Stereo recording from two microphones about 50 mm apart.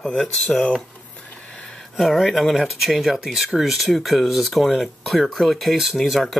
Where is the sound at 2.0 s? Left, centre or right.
Centre.